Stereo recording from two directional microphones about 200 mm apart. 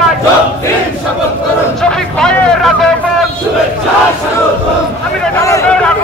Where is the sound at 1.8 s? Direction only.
5° left (ahead or behind).